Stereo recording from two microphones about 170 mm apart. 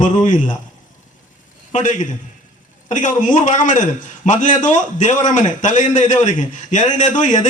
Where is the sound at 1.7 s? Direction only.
45° left (ahead or behind).